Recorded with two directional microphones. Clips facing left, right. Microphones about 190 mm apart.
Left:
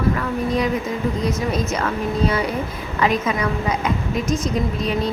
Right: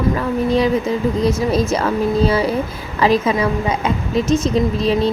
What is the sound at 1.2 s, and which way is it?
A woman's voice, 30° right (ahead or behind).